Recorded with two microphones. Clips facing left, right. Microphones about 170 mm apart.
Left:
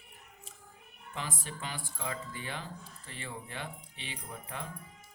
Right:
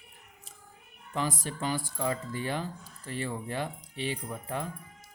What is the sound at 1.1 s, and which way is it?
Speech, 40° right (ahead or behind).